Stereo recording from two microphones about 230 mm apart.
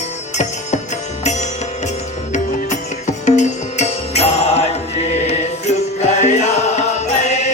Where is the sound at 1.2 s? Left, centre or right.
Left.